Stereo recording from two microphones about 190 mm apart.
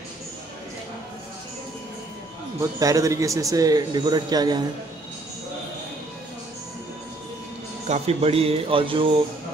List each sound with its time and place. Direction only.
2.6 s a man's voice: 20° right (ahead or behind)
7.8 s speech: 35° right (ahead or behind)